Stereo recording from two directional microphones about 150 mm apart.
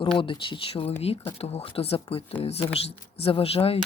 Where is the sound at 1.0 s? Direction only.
40° left (ahead or behind).